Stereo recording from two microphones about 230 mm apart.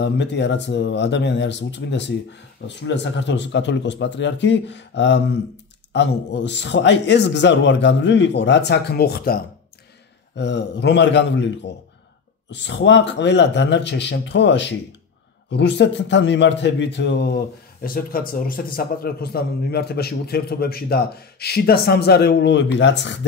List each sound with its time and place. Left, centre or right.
0.0 s speech: left